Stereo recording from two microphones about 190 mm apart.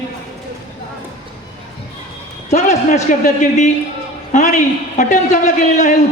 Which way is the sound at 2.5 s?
40° left (ahead or behind).